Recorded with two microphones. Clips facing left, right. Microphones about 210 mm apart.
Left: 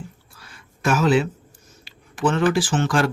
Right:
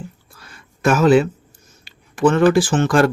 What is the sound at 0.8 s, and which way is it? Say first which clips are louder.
Speech: right 5 dB; 50° right (ahead or behind).